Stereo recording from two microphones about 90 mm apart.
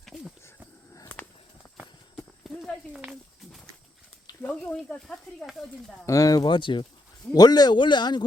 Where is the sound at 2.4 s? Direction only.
Centre (ahead or behind).